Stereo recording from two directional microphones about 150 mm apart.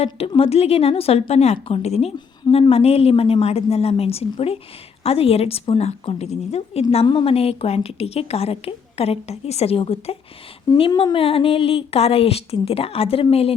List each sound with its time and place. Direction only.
0.0 s a woman's voice: 40° left (ahead or behind)